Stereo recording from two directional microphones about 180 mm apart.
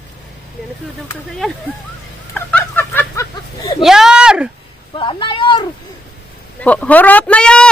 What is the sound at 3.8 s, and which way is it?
Speech, centre (ahead or behind).